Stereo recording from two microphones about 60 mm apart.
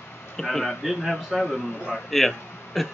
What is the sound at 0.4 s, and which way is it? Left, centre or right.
Speech, centre.